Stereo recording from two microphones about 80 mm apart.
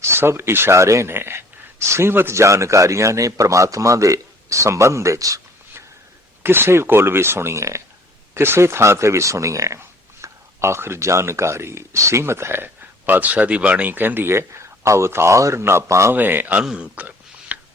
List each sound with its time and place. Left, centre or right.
0.0 s speech: right
6.4 s speech: right
16.1 s a man's voice: right
16.7 s a sound: centre